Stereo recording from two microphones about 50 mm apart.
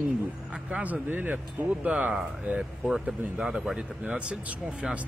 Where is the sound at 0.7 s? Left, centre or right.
Right.